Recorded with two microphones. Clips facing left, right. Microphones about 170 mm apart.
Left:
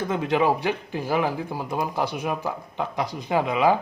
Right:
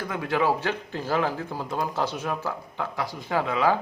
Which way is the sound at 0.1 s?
20° left (ahead or behind).